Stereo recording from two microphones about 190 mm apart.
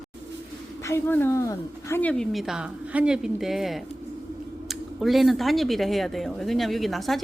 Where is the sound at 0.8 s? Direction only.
10° left (ahead or behind).